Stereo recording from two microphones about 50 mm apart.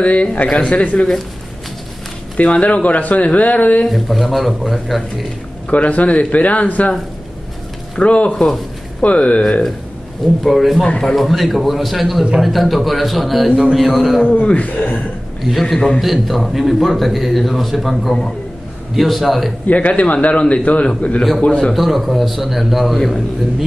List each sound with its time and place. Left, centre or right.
0.0 s speech: left
2.3 s speech: left
3.9 s a man's voice: centre
5.7 s speech: left
8.0 s speech: left
9.4 s a man's voice: centre
13.5 s speech: centre
13.7 s a man's voice: centre
14.4 s speech: left
15.6 s a man's voice: centre
16.0 s a man's voice: centre
19.7 s speech: left
21.7 s a man's voice: centre